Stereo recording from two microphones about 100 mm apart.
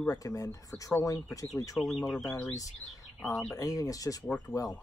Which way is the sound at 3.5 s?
35° left (ahead or behind).